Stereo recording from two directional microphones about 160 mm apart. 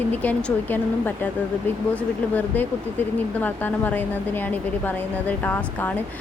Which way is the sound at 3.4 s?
10° left (ahead or behind).